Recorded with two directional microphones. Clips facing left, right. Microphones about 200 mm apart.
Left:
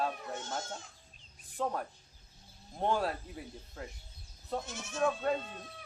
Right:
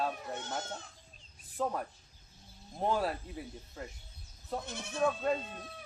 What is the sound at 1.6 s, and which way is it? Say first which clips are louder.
Speech: right 1 dB; centre (ahead or behind).